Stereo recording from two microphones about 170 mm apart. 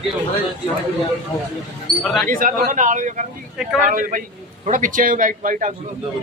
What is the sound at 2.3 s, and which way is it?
A man's voice, 55° right (ahead or behind).